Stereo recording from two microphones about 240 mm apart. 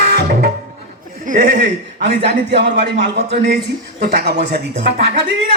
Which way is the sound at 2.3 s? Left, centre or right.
Right.